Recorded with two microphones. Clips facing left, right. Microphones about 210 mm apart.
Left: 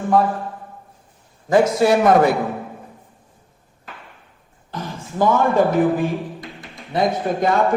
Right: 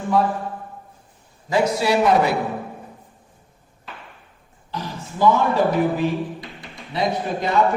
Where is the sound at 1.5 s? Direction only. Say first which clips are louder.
Left 5 dB; 50° left (ahead or behind).